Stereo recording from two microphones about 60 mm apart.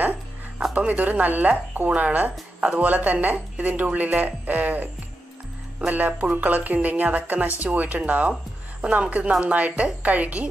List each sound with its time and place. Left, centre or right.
0.7 s speech: right